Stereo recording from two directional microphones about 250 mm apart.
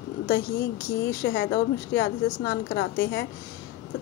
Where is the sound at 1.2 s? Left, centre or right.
Left.